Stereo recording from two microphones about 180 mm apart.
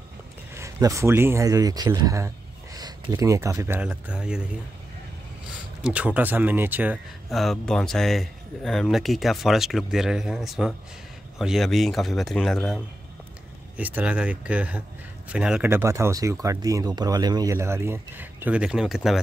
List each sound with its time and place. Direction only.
0.6 s speech: 15° right (ahead or behind)
5.8 s speech: 5° right (ahead or behind)